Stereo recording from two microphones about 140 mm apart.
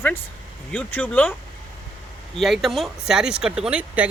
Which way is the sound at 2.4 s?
Centre (ahead or behind).